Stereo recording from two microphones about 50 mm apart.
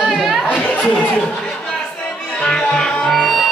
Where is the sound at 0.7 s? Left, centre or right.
Left.